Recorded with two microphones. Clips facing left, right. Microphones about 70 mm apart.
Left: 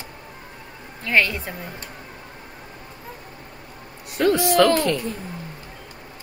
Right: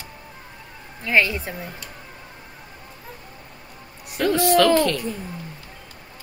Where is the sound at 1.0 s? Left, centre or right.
Centre.